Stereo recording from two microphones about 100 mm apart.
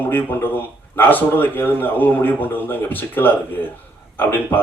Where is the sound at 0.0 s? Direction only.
20° left (ahead or behind).